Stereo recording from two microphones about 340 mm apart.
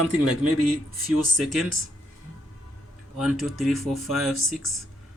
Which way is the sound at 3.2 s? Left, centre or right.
Centre.